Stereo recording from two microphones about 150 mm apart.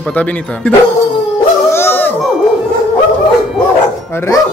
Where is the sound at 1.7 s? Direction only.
15° left (ahead or behind).